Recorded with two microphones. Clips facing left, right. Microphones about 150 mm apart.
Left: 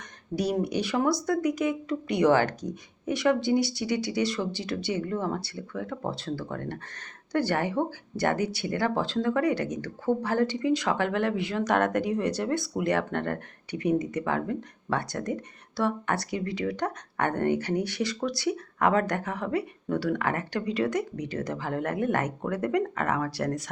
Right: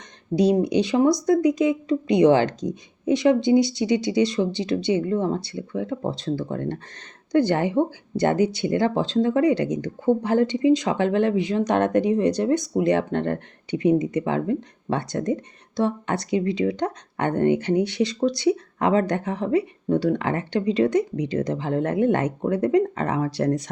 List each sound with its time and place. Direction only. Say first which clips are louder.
0.3 s speech: right 8 dB; 20° right (ahead or behind)